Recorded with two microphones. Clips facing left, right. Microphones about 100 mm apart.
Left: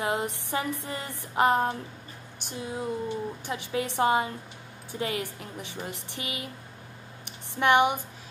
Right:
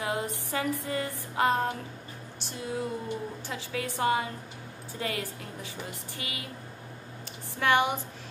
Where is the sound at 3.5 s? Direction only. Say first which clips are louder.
Left 5 dB; 20° left (ahead or behind).